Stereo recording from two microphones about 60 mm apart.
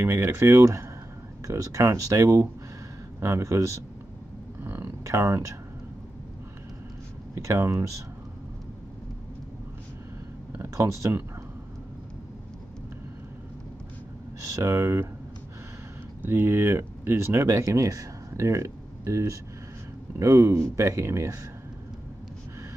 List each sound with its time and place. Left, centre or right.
0.0 s speech: right
4.6 s a sound: right
5.0 s speech: right
7.3 s speech: right
10.6 s speech: right
14.5 s speech: right
16.3 s speech: right